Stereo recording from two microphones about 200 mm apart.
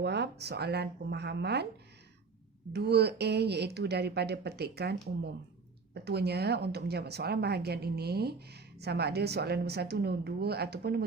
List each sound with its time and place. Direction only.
0.0 s speech: 55° right (ahead or behind)
2.7 s speech: 55° right (ahead or behind)